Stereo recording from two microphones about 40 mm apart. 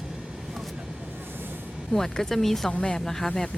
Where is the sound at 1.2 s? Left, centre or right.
Right.